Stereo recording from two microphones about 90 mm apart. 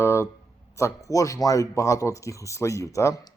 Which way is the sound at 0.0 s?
30° left (ahead or behind).